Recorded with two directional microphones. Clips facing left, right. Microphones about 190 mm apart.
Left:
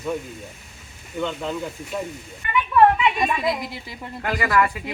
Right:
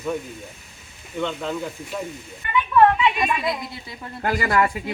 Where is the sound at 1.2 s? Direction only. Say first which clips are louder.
Even; 5° left (ahead or behind).